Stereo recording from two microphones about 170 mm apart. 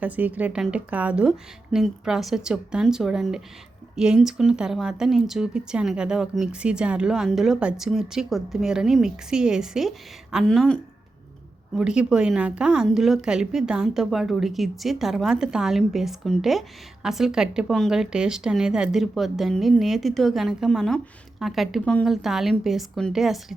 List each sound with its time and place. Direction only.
0.0 s a woman's voice: 10° right (ahead or behind)